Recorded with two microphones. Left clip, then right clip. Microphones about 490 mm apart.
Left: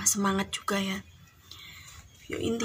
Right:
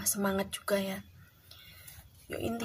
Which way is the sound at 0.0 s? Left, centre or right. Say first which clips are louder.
Left 4 dB; right.